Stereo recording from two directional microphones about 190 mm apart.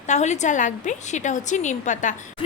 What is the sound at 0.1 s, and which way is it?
A woman's voice, 40° left (ahead or behind).